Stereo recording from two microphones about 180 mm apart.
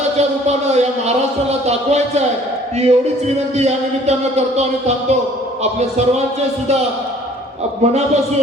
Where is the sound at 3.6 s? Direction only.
35° right (ahead or behind).